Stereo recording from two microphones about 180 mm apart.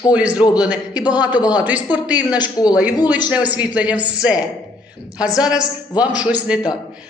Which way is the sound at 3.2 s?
10° right (ahead or behind).